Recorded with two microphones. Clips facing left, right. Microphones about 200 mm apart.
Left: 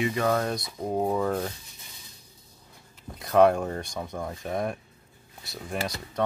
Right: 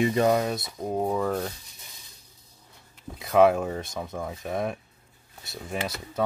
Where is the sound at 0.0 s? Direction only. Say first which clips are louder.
Right 4 dB; 30° right (ahead or behind).